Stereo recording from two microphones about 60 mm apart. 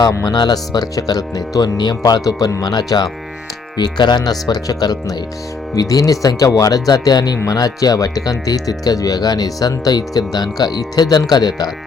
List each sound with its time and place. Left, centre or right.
0.1 s speech: left
4.2 s speech: left
5.7 s speech: left